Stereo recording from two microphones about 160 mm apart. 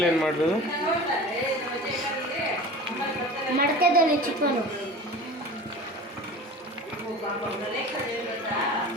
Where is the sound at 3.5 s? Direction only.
70° right (ahead or behind).